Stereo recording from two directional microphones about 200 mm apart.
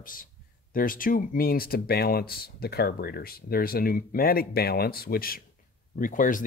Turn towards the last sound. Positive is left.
turn(degrees=40)  # may be behind; listen again after turning